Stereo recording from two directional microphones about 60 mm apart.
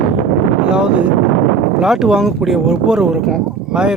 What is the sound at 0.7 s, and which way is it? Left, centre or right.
Speech, centre.